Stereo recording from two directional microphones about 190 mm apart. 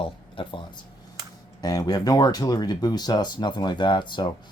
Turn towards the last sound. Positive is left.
turn(degrees=25)  # may be behind; listen again after turning